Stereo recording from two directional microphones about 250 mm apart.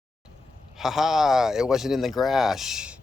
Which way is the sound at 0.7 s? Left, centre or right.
Centre.